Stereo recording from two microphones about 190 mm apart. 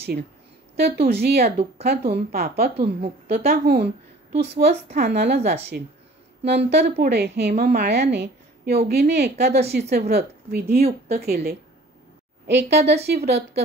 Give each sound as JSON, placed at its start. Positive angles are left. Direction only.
{"t": 0.8, "sound": "a woman's voice", "side_deg": -60}